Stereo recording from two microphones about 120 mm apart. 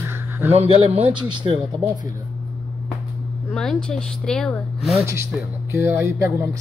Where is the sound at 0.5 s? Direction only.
55° right (ahead or behind).